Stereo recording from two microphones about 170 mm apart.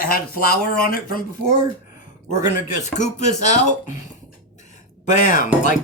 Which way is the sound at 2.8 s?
45° left (ahead or behind).